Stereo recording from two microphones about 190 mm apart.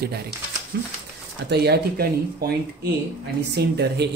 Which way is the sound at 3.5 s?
60° right (ahead or behind).